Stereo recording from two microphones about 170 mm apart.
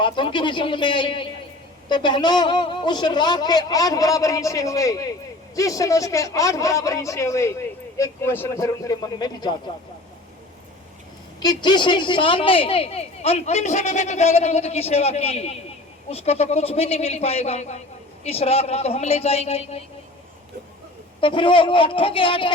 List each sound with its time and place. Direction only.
0.0 s a man's voice: 30° left (ahead or behind)
11.3 s a woman's voice: 25° left (ahead or behind)
21.2 s a woman's voice: 30° left (ahead or behind)